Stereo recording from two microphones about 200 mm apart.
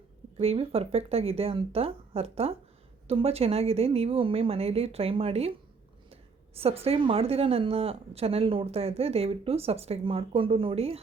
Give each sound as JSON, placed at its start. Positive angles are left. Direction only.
{"t": 0.3, "sound": "a woman's voice", "side_deg": -30}